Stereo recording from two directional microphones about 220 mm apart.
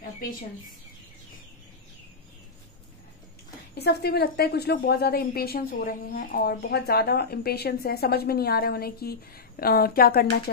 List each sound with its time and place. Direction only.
3.7 s a woman's voice: 45° left (ahead or behind)